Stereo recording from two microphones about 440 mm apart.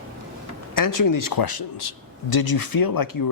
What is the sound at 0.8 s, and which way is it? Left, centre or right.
Speech, left.